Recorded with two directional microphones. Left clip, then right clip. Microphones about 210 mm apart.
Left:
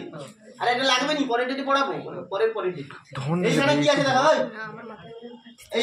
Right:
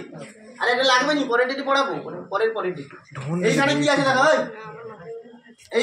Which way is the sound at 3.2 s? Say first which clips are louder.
Right 2 dB; 15° left (ahead or behind).